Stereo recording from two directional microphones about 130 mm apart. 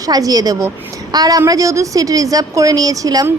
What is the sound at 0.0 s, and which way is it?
A woman's voice, 30° right (ahead or behind).